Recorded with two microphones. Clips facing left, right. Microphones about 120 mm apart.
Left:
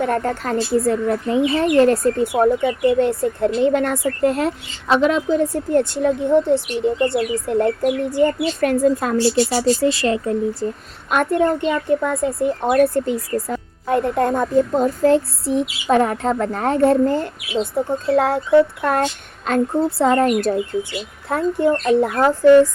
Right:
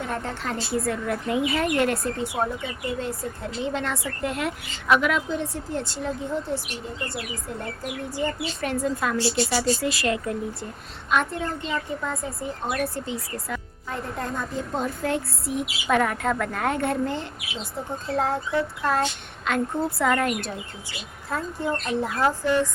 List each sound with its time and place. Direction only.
0.0 s speech: 55° left (ahead or behind); by 2.0 s 35° left (ahead or behind)
2.1 s speech: 50° left (ahead or behind); by 7.7 s 70° left (ahead or behind)
8.1 s speech: 55° left (ahead or behind)
9.9 s speech: 30° left (ahead or behind)
11.1 s a woman's voice: 55° left (ahead or behind)
13.8 s speech: 65° left (ahead or behind); by 17.2 s 40° left (ahead or behind)
17.6 s speech: 70° left (ahead or behind)
18.8 s a woman's voice: 55° left (ahead or behind)
19.5 s speech: 35° left (ahead or behind)
21.2 s a woman's voice: 65° left (ahead or behind)